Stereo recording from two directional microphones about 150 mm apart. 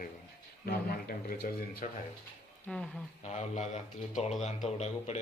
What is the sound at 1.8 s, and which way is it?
Speech, 55° left (ahead or behind).